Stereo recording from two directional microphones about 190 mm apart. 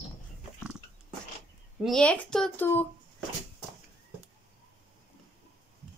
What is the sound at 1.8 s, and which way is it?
Speech, 5° left (ahead or behind).